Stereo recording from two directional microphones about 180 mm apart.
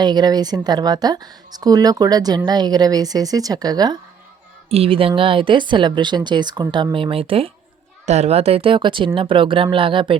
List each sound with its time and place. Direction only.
0.0 s speech: 25° right (ahead or behind)
4.7 s speech: 30° right (ahead or behind)